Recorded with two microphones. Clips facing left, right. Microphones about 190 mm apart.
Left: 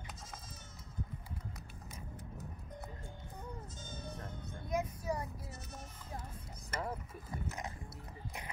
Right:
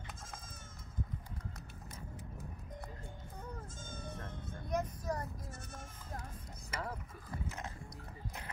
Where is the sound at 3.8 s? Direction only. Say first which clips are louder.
Even; 50° right (ahead or behind).